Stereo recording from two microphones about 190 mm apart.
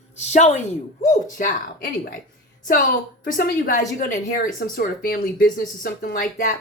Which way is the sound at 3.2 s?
45° left (ahead or behind).